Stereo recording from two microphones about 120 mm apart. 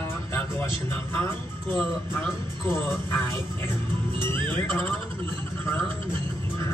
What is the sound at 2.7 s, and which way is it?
Speech, 20° left (ahead or behind).